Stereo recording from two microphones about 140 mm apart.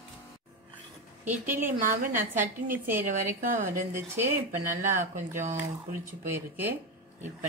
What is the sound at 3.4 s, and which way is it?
Speech, 75° right (ahead or behind).